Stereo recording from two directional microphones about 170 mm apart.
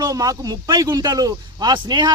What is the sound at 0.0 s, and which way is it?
Speech, 20° right (ahead or behind).